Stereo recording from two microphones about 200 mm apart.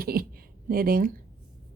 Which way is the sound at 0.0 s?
50° right (ahead or behind).